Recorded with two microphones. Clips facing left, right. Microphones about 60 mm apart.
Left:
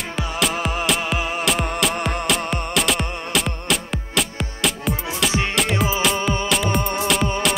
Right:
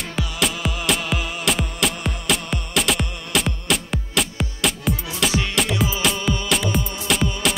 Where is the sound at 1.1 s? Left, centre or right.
Left.